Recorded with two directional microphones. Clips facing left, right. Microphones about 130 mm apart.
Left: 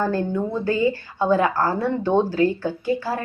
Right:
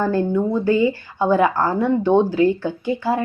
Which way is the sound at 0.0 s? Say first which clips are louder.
Right 4 dB; 15° right (ahead or behind).